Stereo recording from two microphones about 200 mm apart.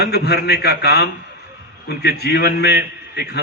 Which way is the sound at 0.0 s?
55° left (ahead or behind).